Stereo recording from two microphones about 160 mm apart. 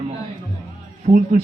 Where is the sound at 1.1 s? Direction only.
50° right (ahead or behind).